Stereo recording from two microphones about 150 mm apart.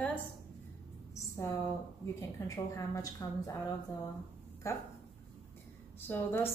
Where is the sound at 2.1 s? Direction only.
20° left (ahead or behind).